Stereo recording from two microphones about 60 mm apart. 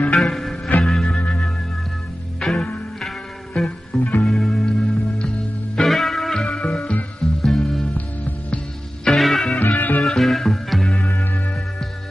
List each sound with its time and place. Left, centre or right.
0.1 s music: centre
1.1 s music: centre
9.0 s music: centre
9.6 s music: left
10.0 s music: centre
11.1 s music: left